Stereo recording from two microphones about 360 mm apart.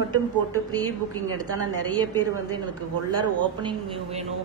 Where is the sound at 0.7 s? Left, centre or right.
Right.